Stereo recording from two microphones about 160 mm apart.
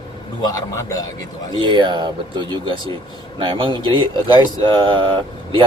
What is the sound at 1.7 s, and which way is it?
Speech, 30° right (ahead or behind).